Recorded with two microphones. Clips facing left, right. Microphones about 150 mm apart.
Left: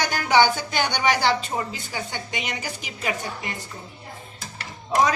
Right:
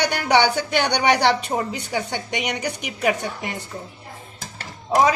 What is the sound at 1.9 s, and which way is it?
A woman's voice, 70° right (ahead or behind).